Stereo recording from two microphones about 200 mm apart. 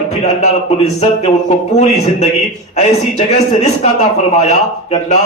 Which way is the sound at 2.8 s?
35° left (ahead or behind).